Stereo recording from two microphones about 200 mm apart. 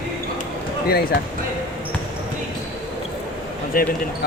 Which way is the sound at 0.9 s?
50° left (ahead or behind).